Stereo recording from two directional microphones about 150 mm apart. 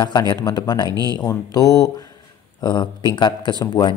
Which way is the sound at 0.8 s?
25° right (ahead or behind).